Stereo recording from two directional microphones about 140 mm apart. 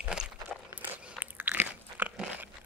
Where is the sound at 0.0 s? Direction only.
5° right (ahead or behind).